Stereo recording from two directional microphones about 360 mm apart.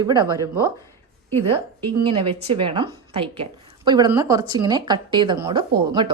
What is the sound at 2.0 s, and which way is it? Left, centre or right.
Speech, centre.